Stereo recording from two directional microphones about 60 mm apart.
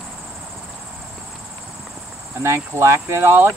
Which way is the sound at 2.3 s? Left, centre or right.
Right.